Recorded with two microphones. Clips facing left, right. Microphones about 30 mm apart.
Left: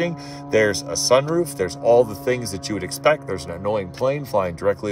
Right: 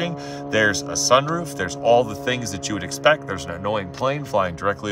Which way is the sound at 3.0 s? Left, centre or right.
Centre.